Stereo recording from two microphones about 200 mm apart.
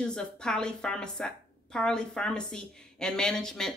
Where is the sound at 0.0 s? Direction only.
5° left (ahead or behind).